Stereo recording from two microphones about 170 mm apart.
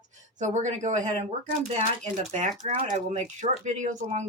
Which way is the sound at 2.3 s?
45° right (ahead or behind).